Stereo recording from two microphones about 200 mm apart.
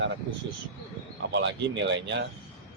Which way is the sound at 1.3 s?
60° right (ahead or behind).